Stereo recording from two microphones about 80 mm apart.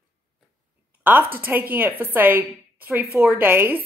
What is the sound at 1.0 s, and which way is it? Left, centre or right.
A woman's voice, right.